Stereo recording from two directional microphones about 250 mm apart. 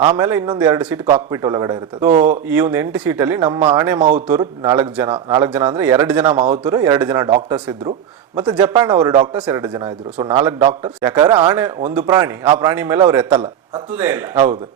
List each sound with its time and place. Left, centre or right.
0.0 s speech: centre
2.0 s speech: right
2.5 s speech: centre
7.3 s speech: right